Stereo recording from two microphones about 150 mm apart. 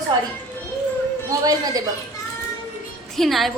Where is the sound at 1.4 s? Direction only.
25° right (ahead or behind).